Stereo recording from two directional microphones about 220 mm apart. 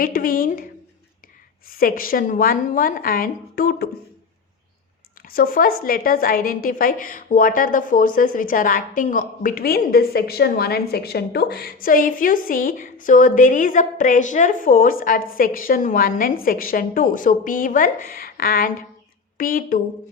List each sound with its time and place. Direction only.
0.0 s a woman's voice: 40° left (ahead or behind)
1.6 s a woman's voice: 40° left (ahead or behind)
5.2 s a woman's voice: 40° left (ahead or behind)